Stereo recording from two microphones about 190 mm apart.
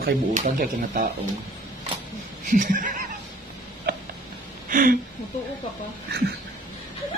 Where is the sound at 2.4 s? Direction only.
45° right (ahead or behind).